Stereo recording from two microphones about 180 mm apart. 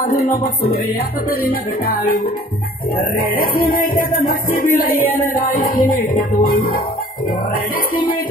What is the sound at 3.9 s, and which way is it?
Music, 50° left (ahead or behind).